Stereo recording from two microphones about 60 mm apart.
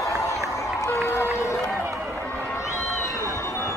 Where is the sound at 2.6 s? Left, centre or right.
Left.